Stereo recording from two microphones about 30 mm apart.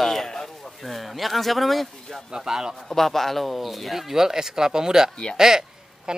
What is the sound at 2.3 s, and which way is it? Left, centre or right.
Speech, right.